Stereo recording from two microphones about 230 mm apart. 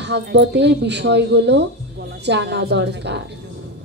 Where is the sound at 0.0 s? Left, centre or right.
Right.